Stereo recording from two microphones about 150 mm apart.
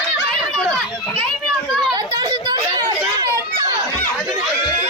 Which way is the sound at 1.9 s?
30° right (ahead or behind).